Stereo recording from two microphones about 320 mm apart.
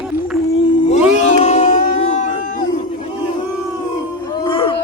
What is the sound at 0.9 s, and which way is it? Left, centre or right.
Crowd, left.